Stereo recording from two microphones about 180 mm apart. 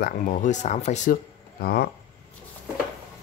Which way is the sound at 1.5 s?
60° left (ahead or behind).